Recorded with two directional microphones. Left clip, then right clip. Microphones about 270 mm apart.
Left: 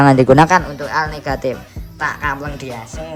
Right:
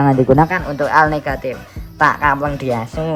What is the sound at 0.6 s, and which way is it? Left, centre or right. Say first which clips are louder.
Speech: right 6 dB; centre.